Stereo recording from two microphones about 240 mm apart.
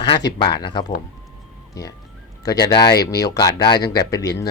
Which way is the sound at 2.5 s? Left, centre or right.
Centre.